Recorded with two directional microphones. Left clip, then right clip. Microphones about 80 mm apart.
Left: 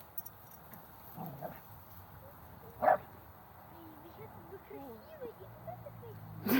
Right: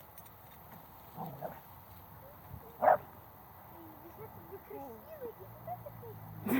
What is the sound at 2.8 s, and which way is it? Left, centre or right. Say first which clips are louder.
Bow-wow: right 2 dB; centre.